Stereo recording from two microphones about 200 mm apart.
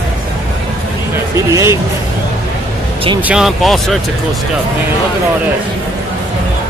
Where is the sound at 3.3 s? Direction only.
Centre (ahead or behind).